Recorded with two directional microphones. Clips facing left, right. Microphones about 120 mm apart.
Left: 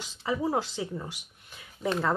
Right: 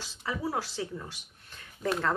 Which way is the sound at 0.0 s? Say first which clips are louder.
Left 4 dB; 20° left (ahead or behind).